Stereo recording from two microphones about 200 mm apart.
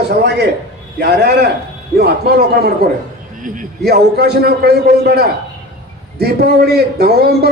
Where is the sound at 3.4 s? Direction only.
40° right (ahead or behind).